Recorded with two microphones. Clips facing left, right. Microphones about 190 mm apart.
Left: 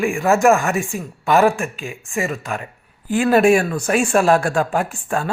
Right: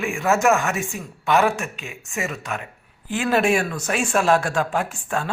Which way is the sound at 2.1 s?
40° left (ahead or behind).